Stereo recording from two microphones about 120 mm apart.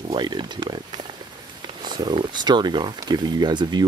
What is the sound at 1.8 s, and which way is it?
Speech, 35° right (ahead or behind).